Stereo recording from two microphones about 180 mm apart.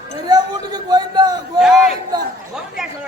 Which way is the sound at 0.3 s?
20° right (ahead or behind).